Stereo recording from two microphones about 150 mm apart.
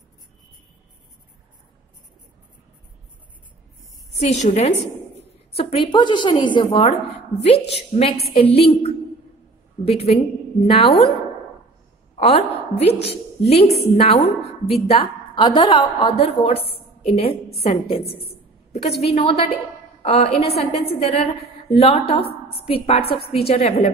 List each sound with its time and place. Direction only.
4.2 s a woman's voice: 50° left (ahead or behind)
12.2 s a woman's voice: 40° left (ahead or behind)